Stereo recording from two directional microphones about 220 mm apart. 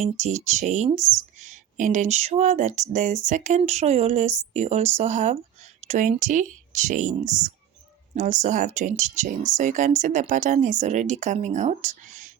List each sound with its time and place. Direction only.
0.0 s speech: 30° right (ahead or behind)